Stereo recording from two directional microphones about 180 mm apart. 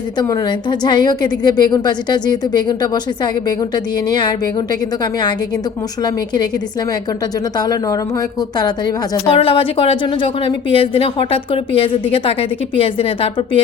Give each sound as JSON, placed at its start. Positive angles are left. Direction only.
{"t": 0.2, "sound": "a woman's voice", "side_deg": 20}
{"t": 6.0, "sound": "a woman's voice", "side_deg": 25}
{"t": 7.5, "sound": "a woman's voice", "side_deg": 20}